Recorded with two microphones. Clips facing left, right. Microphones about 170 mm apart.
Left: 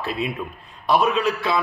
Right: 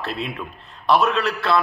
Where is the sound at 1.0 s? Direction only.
10° left (ahead or behind).